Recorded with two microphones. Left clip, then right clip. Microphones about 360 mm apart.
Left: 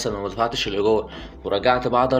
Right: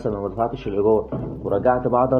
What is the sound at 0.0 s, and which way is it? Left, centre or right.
Speech, right.